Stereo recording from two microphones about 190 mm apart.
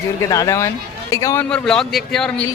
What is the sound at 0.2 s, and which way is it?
Speech, 15° left (ahead or behind).